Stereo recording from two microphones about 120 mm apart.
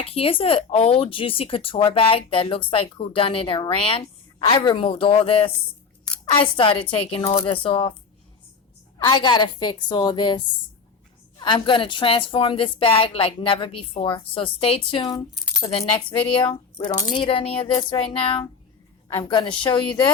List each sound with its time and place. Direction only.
0.0 s speech: 55° left (ahead or behind)
9.0 s a woman's voice: 40° left (ahead or behind)
19.0 s a woman's voice: 30° left (ahead or behind)